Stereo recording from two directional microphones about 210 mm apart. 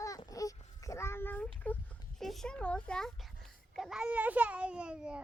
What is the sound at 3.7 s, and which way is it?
A child's voice, centre (ahead or behind).